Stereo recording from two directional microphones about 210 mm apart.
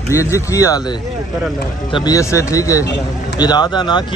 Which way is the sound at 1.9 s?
20° left (ahead or behind).